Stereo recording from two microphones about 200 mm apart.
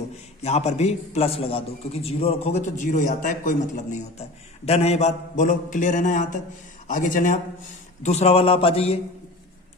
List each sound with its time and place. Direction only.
0.4 s a man's voice: 30° left (ahead or behind)